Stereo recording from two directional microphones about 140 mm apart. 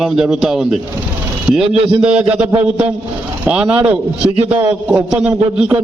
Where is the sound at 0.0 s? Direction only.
Centre (ahead or behind).